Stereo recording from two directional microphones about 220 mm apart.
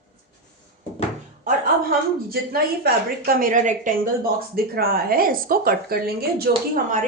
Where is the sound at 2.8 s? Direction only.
40° right (ahead or behind).